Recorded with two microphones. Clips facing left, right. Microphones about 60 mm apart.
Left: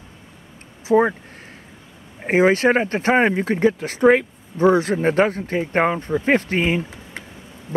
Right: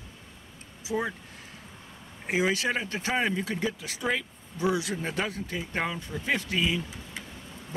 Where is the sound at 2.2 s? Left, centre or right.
Left.